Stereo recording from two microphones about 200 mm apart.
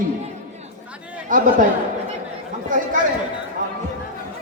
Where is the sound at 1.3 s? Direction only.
40° right (ahead or behind).